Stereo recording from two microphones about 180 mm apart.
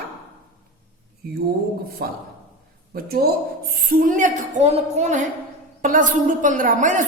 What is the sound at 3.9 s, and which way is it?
A woman's voice, 50° right (ahead or behind).